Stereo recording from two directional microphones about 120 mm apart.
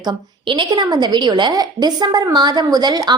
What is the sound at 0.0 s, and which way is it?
Speech, 40° right (ahead or behind).